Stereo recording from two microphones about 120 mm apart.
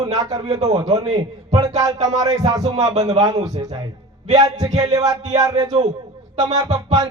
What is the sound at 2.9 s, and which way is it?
Speech, 65° right (ahead or behind).